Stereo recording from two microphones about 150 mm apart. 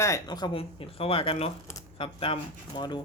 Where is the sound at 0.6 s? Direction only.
40° left (ahead or behind).